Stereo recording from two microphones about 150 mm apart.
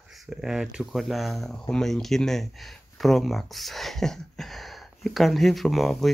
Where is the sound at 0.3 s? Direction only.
5° right (ahead or behind).